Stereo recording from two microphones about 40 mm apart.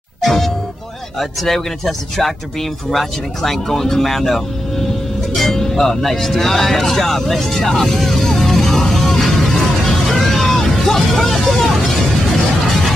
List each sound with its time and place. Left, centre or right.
0.2 s music: centre
1.4 s speech: centre
5.3 s music: centre
12.6 s a sound: centre